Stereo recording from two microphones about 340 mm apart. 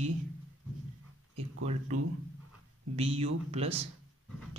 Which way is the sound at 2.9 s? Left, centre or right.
Centre.